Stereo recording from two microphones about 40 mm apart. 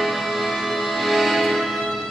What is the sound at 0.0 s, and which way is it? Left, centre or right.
Music, centre.